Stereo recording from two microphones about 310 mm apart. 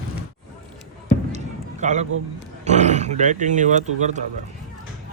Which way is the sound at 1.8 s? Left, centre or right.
Right.